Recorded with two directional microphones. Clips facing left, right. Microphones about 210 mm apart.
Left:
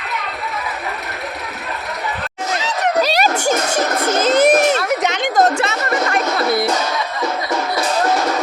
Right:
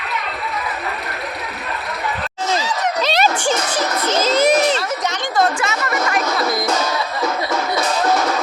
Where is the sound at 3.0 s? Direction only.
40° left (ahead or behind).